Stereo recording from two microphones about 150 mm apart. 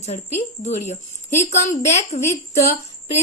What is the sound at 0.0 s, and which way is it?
A woman's voice, 50° left (ahead or behind).